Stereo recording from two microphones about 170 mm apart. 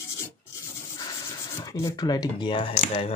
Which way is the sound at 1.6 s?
20° left (ahead or behind).